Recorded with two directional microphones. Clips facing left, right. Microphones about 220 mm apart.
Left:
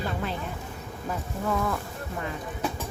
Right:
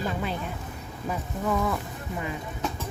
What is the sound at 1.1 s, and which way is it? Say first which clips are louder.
Speech: right 1 dB; 5° right (ahead or behind).